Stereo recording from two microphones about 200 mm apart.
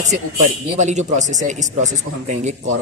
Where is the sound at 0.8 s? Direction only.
35° right (ahead or behind).